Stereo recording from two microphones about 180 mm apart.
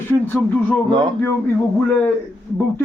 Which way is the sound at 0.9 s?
25° right (ahead or behind).